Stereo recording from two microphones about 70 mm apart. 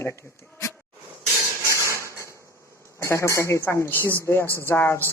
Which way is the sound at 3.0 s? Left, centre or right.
Left.